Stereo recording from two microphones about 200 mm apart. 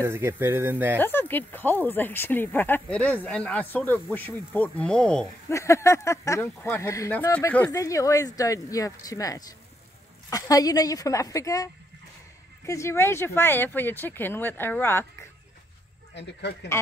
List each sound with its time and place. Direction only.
0.0 s speech: 15° right (ahead or behind)
0.9 s speech: 10° left (ahead or behind)
5.5 s speech: 15° left (ahead or behind)
16.2 s speech: 60° left (ahead or behind)